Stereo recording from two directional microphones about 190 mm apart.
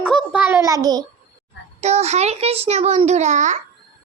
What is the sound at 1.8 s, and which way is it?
A child's voice, 35° right (ahead or behind).